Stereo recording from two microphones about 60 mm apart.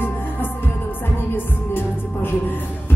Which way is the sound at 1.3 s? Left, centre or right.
Left.